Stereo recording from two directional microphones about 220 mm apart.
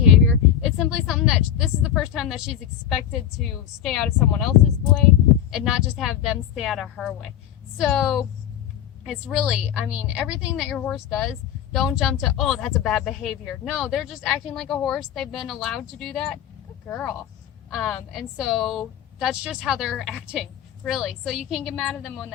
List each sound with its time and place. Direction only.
0.6 s a woman's voice: centre (ahead or behind)